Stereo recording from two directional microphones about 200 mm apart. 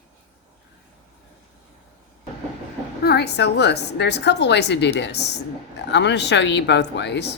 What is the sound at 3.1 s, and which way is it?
Speech, 55° left (ahead or behind).